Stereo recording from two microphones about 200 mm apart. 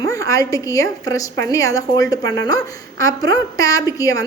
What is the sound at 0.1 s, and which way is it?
Speech, 15° left (ahead or behind).